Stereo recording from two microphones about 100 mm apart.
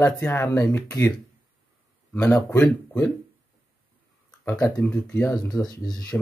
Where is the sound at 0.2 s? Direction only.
25° left (ahead or behind).